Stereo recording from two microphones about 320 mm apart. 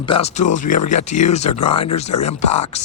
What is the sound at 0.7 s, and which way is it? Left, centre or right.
Speech, left.